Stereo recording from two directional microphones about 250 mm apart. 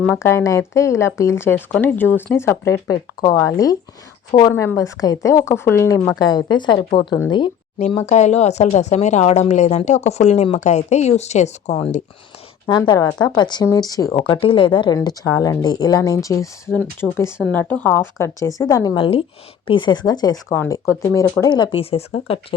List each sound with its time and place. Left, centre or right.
0.0 s a woman's voice: centre
16.6 s speech: centre
17.0 s a woman's voice: centre